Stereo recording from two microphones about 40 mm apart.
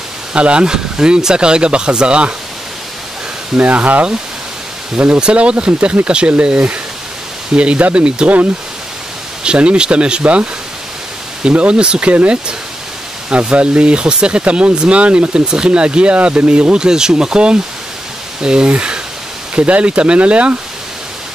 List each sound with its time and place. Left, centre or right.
0.3 s speech: right
3.5 s speech: right
9.4 s speech: right
11.5 s speech: right
13.3 s speech: right
16.8 s speech: centre